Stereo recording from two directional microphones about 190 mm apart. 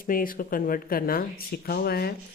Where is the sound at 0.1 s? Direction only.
45° left (ahead or behind).